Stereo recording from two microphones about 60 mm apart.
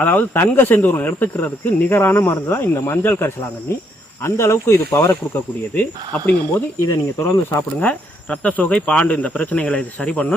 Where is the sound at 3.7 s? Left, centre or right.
Left.